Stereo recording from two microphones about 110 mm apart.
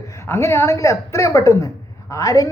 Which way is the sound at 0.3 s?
25° left (ahead or behind).